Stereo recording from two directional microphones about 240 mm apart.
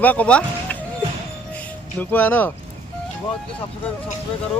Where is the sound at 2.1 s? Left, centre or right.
Centre.